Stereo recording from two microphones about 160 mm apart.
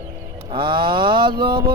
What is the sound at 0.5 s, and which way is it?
Music, 30° right (ahead or behind).